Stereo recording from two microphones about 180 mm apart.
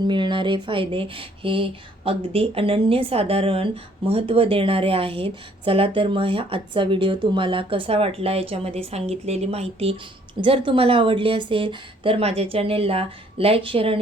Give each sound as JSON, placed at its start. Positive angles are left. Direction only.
{"t": 0.0, "sound": "speech", "side_deg": -25}